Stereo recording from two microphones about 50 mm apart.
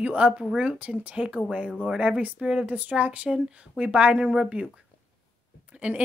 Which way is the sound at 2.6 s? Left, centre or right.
Right.